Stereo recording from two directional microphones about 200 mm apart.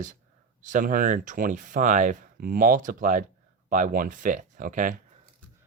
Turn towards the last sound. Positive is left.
turn(degrees=-40)  # may be behind; listen again after turning